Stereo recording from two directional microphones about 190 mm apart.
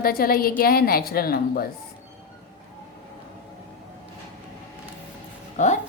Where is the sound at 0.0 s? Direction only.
50° left (ahead or behind).